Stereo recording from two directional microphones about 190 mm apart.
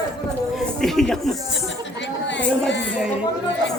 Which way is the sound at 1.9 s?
70° left (ahead or behind).